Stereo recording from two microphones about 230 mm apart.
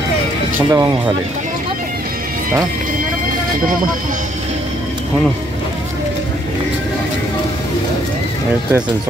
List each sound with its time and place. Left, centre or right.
0.7 s speech: centre